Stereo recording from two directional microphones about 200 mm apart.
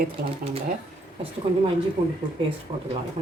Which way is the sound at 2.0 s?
25° right (ahead or behind).